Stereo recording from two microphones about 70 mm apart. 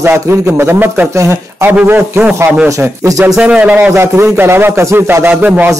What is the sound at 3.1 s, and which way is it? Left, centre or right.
Speech, right.